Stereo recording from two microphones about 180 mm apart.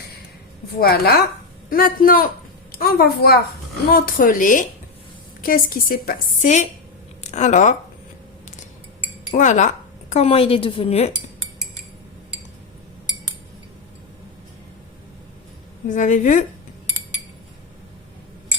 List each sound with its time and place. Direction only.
0.8 s a woman's voice: 55° left (ahead or behind)
9.3 s a woman's voice: 40° left (ahead or behind)
15.9 s a woman's voice: 45° left (ahead or behind)